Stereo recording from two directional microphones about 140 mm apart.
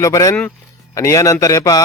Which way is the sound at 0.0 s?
25° left (ahead or behind).